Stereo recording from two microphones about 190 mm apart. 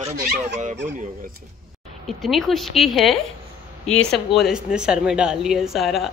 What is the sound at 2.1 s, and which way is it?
Speech, centre (ahead or behind).